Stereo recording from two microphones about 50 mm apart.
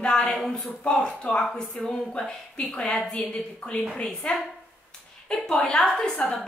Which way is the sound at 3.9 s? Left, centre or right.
Left.